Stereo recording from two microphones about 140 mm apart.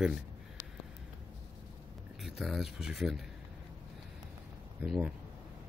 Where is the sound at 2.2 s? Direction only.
Centre (ahead or behind).